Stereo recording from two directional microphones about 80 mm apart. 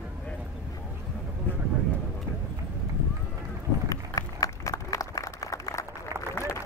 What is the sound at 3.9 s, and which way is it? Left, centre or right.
Run, left.